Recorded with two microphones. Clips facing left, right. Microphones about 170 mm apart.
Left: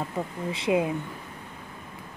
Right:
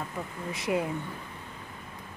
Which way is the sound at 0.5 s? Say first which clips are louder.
Left 4 dB; 20° left (ahead or behind).